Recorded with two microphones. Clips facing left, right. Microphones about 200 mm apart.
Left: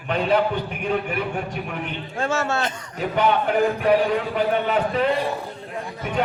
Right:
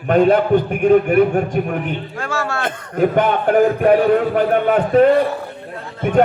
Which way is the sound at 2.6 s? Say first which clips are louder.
Right 9 dB; 55° right (ahead or behind).